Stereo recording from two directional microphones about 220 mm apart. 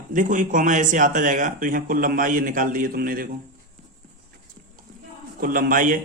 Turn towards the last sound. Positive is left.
turn(degrees=-40)  # may be behind; listen again after turning